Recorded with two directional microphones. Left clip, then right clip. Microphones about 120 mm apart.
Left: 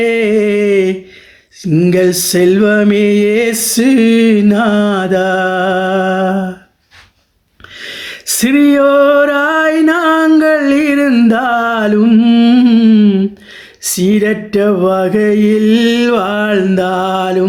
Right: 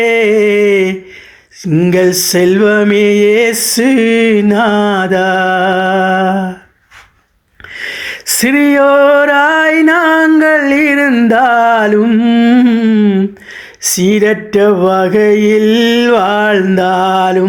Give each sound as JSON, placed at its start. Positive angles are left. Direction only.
{"t": 0.0, "sound": "a sound", "side_deg": -15}
{"t": 2.0, "sound": "music", "side_deg": 45}
{"t": 2.3, "sound": "mantra", "side_deg": -15}
{"t": 3.5, "sound": "music", "side_deg": 50}
{"t": 3.8, "sound": "mantra", "side_deg": -10}
{"t": 7.8, "sound": "a sound", "side_deg": -25}
{"t": 11.3, "sound": "music", "side_deg": -20}
{"t": 13.9, "sound": "mantra", "side_deg": -25}